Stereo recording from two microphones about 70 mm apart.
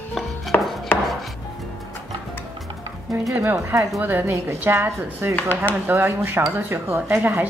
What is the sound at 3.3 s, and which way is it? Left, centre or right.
Speech, right.